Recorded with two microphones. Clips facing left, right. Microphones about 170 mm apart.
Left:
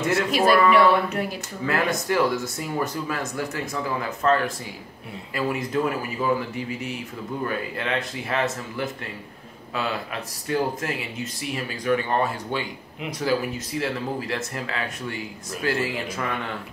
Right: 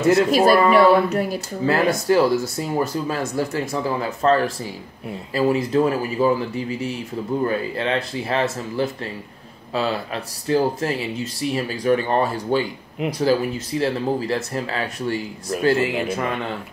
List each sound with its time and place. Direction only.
0.0 s speech: 40° right (ahead or behind)
10.5 s speech: 35° right (ahead or behind)